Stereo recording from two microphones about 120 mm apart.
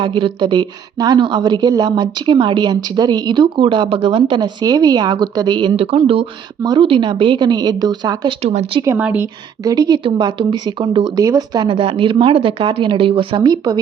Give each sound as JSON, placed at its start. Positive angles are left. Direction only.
{"t": 0.0, "sound": "speech", "side_deg": -40}
{"t": 5.7, "sound": "speech", "side_deg": -55}
{"t": 6.6, "sound": "speech", "side_deg": -40}
{"t": 8.4, "sound": "speech", "side_deg": -55}
{"t": 9.0, "sound": "a woman's voice", "side_deg": -10}
{"t": 9.6, "sound": "speech", "side_deg": -30}
{"t": 11.2, "sound": "speech", "side_deg": -30}
{"t": 11.7, "sound": "speech", "side_deg": -45}